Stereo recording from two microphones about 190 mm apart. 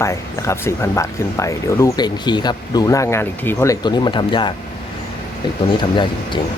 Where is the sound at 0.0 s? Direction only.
15° left (ahead or behind).